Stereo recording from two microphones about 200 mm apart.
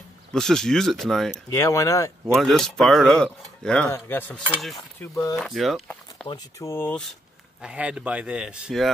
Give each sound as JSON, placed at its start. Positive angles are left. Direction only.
{"t": 0.3, "sound": "speech", "side_deg": 0}
{"t": 1.5, "sound": "speech", "side_deg": 15}
{"t": 2.3, "sound": "speech", "side_deg": 0}
{"t": 5.3, "sound": "speech", "side_deg": 0}
{"t": 6.2, "sound": "speech", "side_deg": 15}
{"t": 7.6, "sound": "speech", "side_deg": -5}